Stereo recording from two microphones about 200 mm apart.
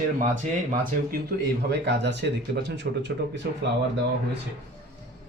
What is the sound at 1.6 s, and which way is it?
Speech, 60° right (ahead or behind).